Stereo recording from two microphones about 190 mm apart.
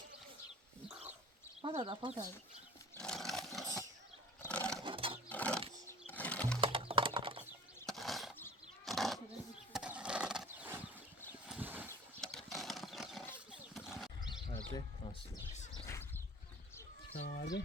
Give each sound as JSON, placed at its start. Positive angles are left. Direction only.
{"t": 1.6, "sound": "speech", "side_deg": -25}
{"t": 2.9, "sound": "a sound", "side_deg": 5}
{"t": 4.8, "sound": "sewing machine", "side_deg": -25}
{"t": 5.3, "sound": "wild animals", "side_deg": 5}
{"t": 6.1, "sound": "sewing machine", "side_deg": 10}
{"t": 6.6, "sound": "typing", "side_deg": -30}
{"t": 7.9, "sound": "a sound", "side_deg": 0}
{"t": 11.3, "sound": "horse", "side_deg": -10}
{"t": 14.2, "sound": "bird", "side_deg": 25}
{"t": 15.9, "sound": "a sound", "side_deg": 10}
{"t": 17.2, "sound": "speech", "side_deg": 55}